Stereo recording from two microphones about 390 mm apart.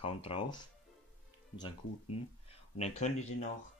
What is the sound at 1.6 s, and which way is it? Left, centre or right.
Speech, centre.